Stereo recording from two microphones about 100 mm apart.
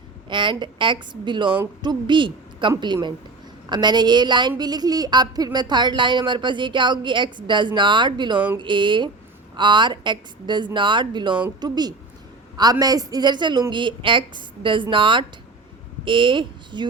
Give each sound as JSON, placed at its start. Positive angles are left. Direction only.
{"t": 0.3, "sound": "a woman's voice", "side_deg": -55}